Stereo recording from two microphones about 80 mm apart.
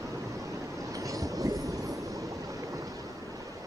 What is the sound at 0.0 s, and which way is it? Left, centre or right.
Vehicle, right.